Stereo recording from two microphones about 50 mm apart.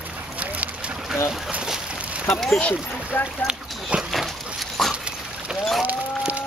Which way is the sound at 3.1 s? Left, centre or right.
Left.